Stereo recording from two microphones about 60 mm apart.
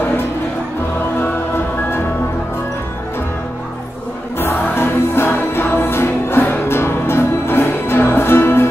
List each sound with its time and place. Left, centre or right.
4.4 s music: left